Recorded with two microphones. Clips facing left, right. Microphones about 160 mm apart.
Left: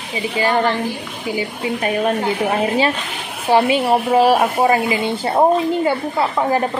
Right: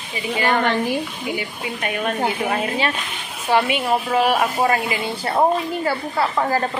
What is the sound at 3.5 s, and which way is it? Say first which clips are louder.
A woman's voice: left 4 dB; 30° left (ahead or behind).